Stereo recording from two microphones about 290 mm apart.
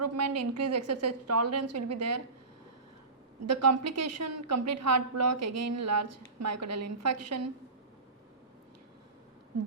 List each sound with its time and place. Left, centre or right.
0.0 s a woman's voice: right
3.4 s a woman's voice: right